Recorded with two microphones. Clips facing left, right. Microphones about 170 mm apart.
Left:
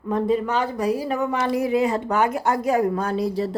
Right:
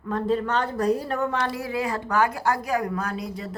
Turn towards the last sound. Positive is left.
turn(degrees=30)  # may be behind; listen again after turning